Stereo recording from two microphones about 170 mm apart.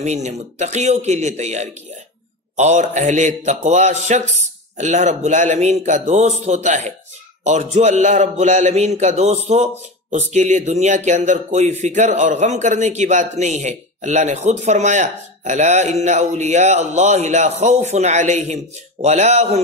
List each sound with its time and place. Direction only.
0.0 s speech: 40° right (ahead or behind)